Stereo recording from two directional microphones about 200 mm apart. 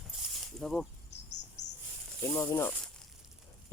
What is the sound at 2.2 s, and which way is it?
Speech, 15° left (ahead or behind).